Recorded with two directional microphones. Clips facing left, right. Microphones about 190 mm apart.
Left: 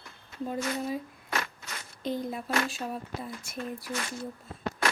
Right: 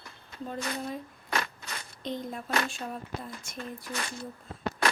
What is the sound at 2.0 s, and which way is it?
Speech, 5° left (ahead or behind).